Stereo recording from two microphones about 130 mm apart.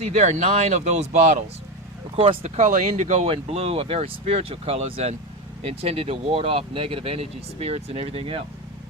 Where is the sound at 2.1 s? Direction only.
45° right (ahead or behind); by 3.2 s 65° right (ahead or behind).